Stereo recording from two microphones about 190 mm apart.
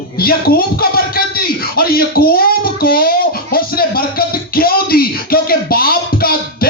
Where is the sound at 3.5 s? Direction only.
50° left (ahead or behind).